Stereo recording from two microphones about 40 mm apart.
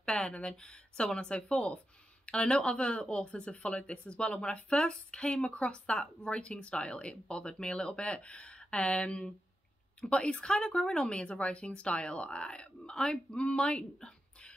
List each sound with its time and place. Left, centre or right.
0.2 s speech: left